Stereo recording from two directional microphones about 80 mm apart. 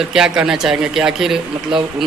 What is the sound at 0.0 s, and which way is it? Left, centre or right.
Speech, centre.